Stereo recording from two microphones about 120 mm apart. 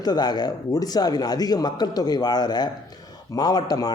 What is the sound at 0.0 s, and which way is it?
Speech, 35° left (ahead or behind).